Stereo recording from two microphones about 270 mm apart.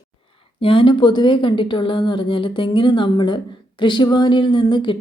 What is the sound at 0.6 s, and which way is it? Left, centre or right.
Speech, centre.